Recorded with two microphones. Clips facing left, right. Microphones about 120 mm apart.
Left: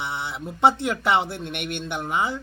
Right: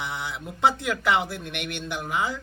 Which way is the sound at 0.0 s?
30° left (ahead or behind).